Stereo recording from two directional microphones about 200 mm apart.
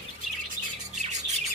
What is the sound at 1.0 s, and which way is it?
Bird, 35° right (ahead or behind).